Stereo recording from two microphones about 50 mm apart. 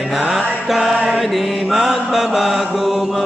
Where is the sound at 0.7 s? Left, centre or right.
Centre.